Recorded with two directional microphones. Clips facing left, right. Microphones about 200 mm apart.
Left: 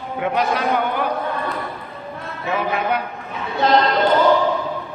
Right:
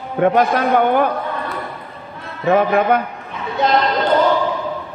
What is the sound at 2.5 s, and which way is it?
Speech, 50° right (ahead or behind).